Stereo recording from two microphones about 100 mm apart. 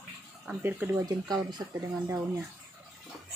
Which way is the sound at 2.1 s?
30° right (ahead or behind).